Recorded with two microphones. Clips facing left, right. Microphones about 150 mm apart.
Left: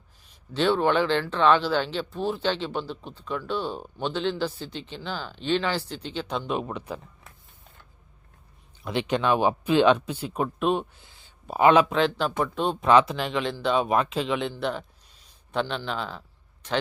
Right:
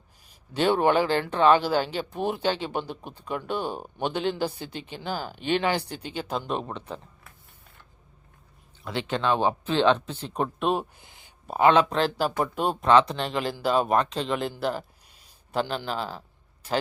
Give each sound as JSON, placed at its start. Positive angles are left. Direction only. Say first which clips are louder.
{"t": 0.5, "sound": "speech", "louder": "right 1 dB", "side_deg": -10}
{"t": 8.8, "sound": "speech", "louder": "left 2 dB", "side_deg": 20}
{"t": 10.9, "sound": "a sound", "louder": "right 2 dB", "side_deg": -15}
{"t": 11.6, "sound": "speech", "louder": "left 1 dB", "side_deg": 10}
{"t": 11.9, "sound": "speech", "louder": "left 1 dB", "side_deg": 0}
{"t": 12.8, "sound": "speech", "louder": "even", "side_deg": 10}